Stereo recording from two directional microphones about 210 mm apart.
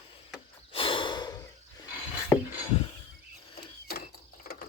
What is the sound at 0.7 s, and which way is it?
Breathing, 25° left (ahead or behind).